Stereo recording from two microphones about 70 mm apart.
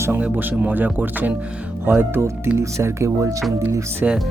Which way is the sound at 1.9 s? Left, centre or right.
Right.